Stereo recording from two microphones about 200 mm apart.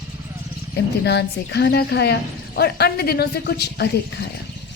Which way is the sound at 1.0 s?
55° left (ahead or behind).